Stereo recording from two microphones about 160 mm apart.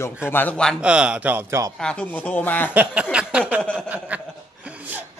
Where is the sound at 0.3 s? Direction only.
10° left (ahead or behind).